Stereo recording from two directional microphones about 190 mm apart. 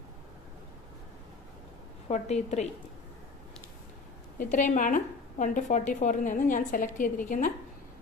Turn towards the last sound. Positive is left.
turn(degrees=45)  # may be behind; listen again after turning